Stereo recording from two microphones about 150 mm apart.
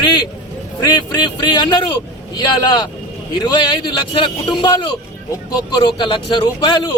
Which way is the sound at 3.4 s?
30° left (ahead or behind).